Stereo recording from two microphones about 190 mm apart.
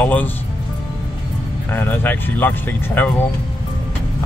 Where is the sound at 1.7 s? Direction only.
10° left (ahead or behind).